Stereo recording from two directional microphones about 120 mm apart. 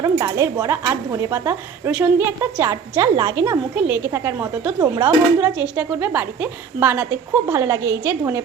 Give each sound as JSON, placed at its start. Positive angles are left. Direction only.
{"t": 0.0, "sound": "speech", "side_deg": -25}
{"t": 3.8, "sound": "speech", "side_deg": -15}